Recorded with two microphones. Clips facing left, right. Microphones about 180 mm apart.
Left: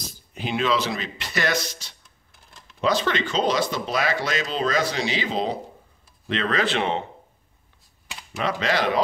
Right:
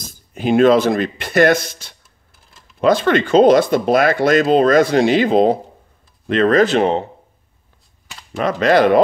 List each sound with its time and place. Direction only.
0.0 s speech: 50° right (ahead or behind)
8.4 s speech: 50° right (ahead or behind)